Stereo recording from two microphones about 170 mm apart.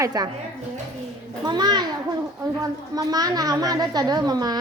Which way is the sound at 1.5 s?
25° right (ahead or behind).